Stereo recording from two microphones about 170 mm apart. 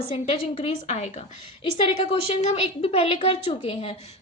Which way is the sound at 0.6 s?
40° left (ahead or behind).